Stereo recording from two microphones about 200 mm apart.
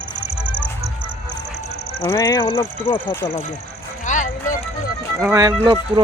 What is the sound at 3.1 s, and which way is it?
Speech, 15° left (ahead or behind).